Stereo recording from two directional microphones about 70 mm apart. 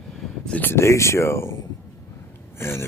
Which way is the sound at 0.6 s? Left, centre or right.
Left.